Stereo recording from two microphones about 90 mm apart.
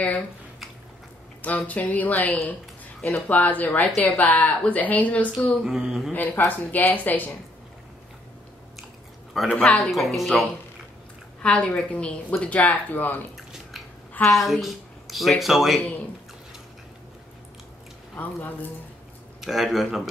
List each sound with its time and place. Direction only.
1.4 s speech: 15° left (ahead or behind)
5.6 s speech: 5° right (ahead or behind)
6.1 s speech: 20° left (ahead or behind)
9.3 s speech: centre (ahead or behind)
9.6 s speech: 15° left (ahead or behind)
9.8 s speech: centre (ahead or behind)
11.4 s speech: 15° left (ahead or behind)
13.4 s bathtub: centre (ahead or behind)
14.3 s speech: centre (ahead or behind)
18.1 s speech: 20° left (ahead or behind)
19.4 s speech: centre (ahead or behind)